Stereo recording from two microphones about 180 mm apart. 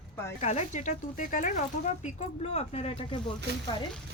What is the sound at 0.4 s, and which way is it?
Speech, 40° left (ahead or behind).